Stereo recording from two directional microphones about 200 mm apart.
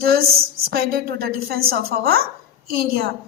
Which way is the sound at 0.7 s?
50° right (ahead or behind).